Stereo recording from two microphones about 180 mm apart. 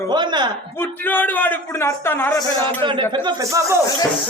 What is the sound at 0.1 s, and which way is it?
Speech, 25° right (ahead or behind).